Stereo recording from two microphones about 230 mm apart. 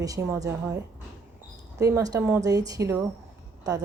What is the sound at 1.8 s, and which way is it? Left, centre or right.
A woman's voice, centre.